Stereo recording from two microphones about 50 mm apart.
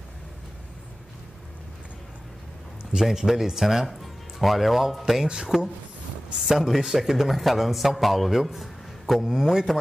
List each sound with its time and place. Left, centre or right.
2.9 s speech: centre
5.2 s a man's voice: centre
6.4 s a man's voice: centre